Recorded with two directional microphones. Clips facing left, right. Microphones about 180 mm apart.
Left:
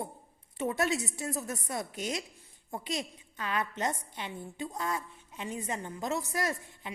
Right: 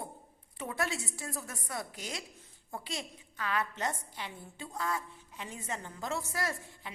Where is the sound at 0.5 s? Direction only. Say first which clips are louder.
Left 6 dB; 20° left (ahead or behind).